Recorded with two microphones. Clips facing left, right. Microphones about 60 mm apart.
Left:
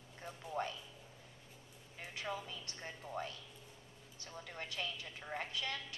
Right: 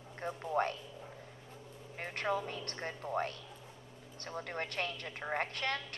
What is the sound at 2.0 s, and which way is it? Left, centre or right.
A woman's voice, right.